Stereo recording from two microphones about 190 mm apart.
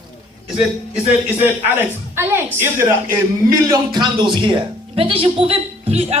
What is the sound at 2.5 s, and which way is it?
Speech, 10° right (ahead or behind).